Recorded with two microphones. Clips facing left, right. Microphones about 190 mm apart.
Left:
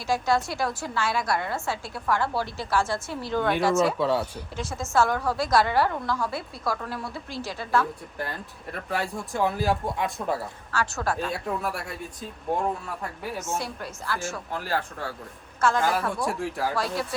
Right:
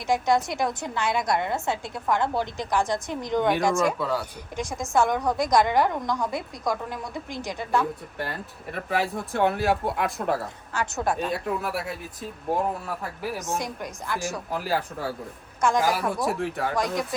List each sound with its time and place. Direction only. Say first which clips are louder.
0.1 s a woman's voice: right 2 dB; 20° right (ahead or behind)
3.9 s speech: left 3 dB; 25° left (ahead or behind)
4.5 s a woman's voice: right 1 dB; 15° right (ahead or behind)
8.2 s speech: even; centre (ahead or behind)
10.7 s a woman's voice: right 1 dB; 20° right (ahead or behind)
11.3 s speech: right 2 dB; centre (ahead or behind)
13.6 s a woman's voice: right 1 dB; 15° right (ahead or behind)
14.5 s speech: right 2 dB; 5° right (ahead or behind)
15.6 s a woman's voice: right 1 dB; 15° right (ahead or behind)
16.2 s speech: right 1 dB; centre (ahead or behind)
16.7 s a woman's voice: right 2 dB; 15° right (ahead or behind)